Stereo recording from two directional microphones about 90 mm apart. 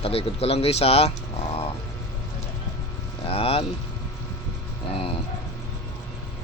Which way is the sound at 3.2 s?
90° left.